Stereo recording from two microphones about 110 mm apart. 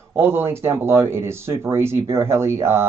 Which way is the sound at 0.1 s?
20° right (ahead or behind).